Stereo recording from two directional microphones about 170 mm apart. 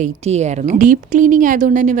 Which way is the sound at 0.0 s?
40° right (ahead or behind).